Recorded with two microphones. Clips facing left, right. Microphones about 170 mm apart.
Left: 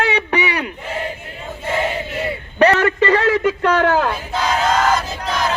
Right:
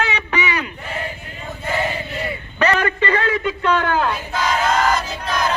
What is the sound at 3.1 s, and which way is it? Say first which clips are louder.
Speech: left 5 dB; 85° left.